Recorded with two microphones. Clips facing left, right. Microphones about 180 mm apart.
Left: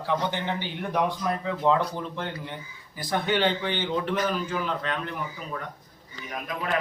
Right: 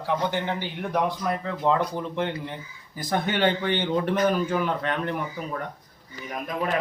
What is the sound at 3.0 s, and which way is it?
Speech, 50° right (ahead or behind).